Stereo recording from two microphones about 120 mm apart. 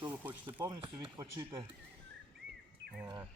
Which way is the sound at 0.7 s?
40° right (ahead or behind).